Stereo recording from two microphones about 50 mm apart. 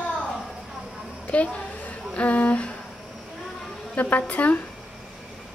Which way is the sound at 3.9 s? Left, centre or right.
Left.